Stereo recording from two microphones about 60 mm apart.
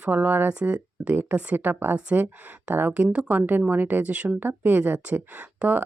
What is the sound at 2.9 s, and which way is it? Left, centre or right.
Speech, right.